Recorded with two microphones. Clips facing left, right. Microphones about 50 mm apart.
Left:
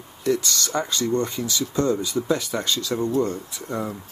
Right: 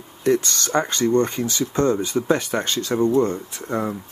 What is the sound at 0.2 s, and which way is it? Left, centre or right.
Speech, right.